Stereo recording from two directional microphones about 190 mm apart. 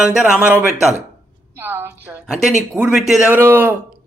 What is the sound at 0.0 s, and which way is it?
A woman's voice, 5° right (ahead or behind).